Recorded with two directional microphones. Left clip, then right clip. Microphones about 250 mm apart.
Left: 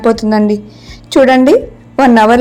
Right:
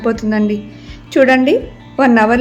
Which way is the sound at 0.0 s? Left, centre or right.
Centre.